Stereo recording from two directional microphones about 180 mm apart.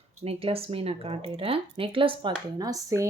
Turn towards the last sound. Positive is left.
turn(degrees=-20)  # may be behind; listen again after turning